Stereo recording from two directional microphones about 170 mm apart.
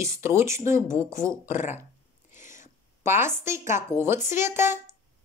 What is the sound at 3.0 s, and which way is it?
A woman's voice, 15° right (ahead or behind).